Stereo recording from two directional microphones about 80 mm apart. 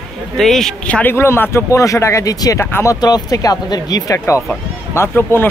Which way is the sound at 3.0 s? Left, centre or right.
Left.